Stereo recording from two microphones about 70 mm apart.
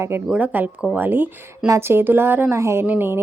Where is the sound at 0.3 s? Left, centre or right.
Right.